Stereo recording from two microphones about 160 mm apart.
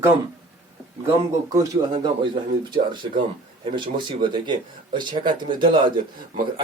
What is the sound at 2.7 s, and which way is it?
Speech, 30° right (ahead or behind).